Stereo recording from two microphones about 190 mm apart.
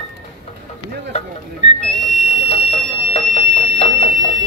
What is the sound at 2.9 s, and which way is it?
Clock, 30° left (ahead or behind).